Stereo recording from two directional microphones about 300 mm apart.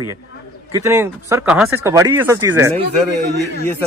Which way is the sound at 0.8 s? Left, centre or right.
Centre.